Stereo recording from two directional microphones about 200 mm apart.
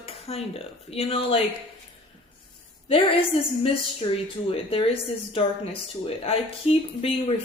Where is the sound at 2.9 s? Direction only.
25° left (ahead or behind).